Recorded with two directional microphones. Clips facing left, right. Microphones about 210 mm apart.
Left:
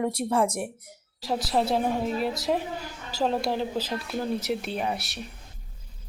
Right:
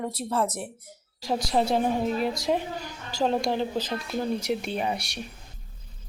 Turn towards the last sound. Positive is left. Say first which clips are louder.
# right 1 dB
turn(degrees=0)  # may be behind; listen again after turning